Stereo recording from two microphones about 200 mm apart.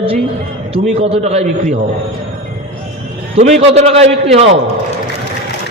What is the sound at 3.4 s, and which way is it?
A man's voice, 35° right (ahead or behind).